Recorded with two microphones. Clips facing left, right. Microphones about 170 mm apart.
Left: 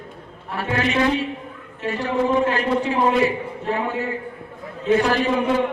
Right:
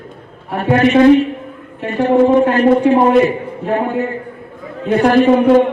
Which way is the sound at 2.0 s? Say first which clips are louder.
Right 9 dB; 50° right (ahead or behind).